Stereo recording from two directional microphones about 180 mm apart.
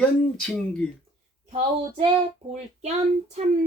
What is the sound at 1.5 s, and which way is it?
Child singing, 35° right (ahead or behind).